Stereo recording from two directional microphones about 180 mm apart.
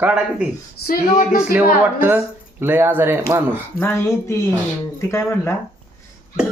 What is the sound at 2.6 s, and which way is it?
Speech, 10° right (ahead or behind).